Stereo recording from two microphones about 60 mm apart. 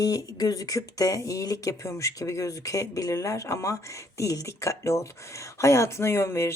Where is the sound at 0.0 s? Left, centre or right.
Left.